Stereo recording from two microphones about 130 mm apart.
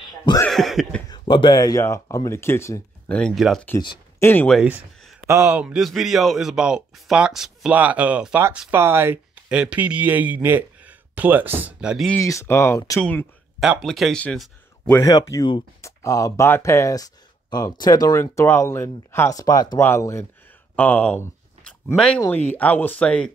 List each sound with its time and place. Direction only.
0.5 s cough: centre (ahead or behind)
1.1 s speech: 35° left (ahead or behind); by 2.8 s 20° left (ahead or behind)
3.1 s a man's voice: 5° left (ahead or behind)
4.2 s speech: 15° left (ahead or behind)
5.2 s speech: 20° right (ahead or behind)
5.6 s a man's voice: 5° right (ahead or behind)
12.2 s speech: 20° left (ahead or behind)
13.6 s a man's voice: centre (ahead or behind)
15.0 s speech: 25° left (ahead or behind)
19.3 s speech: 30° left (ahead or behind)
19.8 s speech: 20° left (ahead or behind)
20.7 s a sound: 10° left (ahead or behind)
21.9 s speech: 5° left (ahead or behind)